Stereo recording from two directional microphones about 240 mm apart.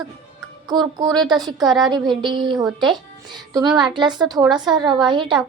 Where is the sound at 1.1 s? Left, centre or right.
Centre.